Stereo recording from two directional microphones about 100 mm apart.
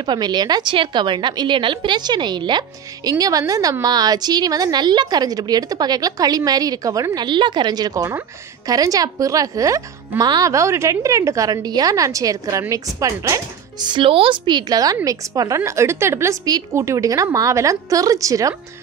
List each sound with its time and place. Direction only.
0.0 s a woman's voice: 45° right (ahead or behind)
10.2 s a woman's voice: 45° right (ahead or behind)
10.5 s a woman's voice: 30° right (ahead or behind)